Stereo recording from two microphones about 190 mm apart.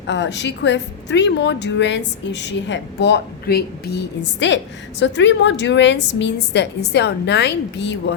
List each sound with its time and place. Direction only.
0.1 s a woman's voice: 70° left (ahead or behind)